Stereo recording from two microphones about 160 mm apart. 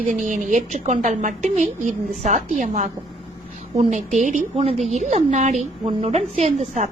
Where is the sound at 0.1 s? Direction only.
50° right (ahead or behind).